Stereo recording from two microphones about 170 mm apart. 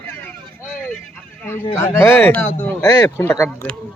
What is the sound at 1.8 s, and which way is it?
Speech, 15° left (ahead or behind).